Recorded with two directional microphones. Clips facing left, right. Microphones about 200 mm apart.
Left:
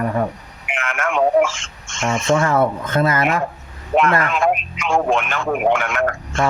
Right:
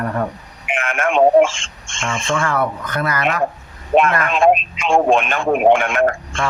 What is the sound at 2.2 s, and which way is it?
Speech, 20° left (ahead or behind).